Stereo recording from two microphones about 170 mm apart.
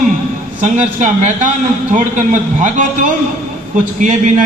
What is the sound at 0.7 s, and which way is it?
A man's voice, 45° right (ahead or behind).